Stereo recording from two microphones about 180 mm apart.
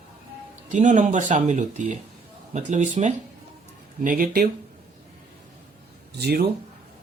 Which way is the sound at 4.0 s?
50° right (ahead or behind).